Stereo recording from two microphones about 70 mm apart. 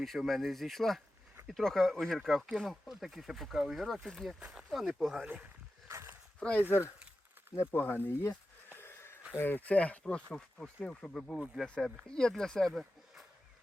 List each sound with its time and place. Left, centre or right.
0.0 s speech: centre
4.4 s speech: centre
4.7 s speech: centre
5.2 s speech: centre
6.4 s speech: centre
6.7 s speech: left
7.5 s a sound: left
9.4 s speech: left; by 13.2 s centre